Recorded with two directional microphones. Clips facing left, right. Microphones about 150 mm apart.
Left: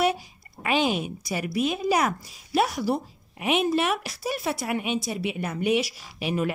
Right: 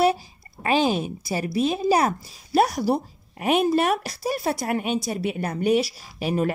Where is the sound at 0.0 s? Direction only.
35° right (ahead or behind).